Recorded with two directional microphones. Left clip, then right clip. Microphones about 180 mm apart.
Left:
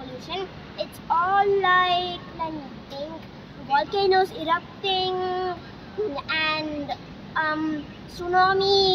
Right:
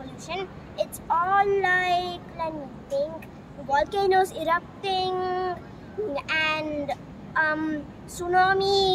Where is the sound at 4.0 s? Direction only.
35° right (ahead or behind).